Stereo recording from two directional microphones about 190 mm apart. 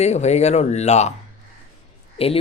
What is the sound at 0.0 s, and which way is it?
Speech, 35° left (ahead or behind).